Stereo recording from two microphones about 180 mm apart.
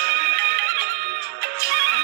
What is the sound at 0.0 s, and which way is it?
Music, 55° right (ahead or behind).